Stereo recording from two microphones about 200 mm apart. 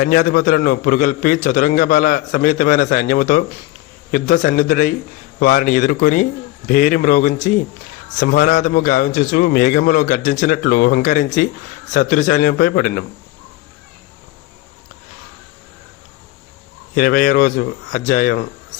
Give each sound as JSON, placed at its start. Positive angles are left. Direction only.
{"t": 0.0, "sound": "a man's voice", "side_deg": 45}
{"t": 16.9, "sound": "a man's voice", "side_deg": 45}